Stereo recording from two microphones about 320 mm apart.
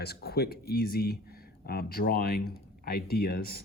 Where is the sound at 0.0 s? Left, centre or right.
Left.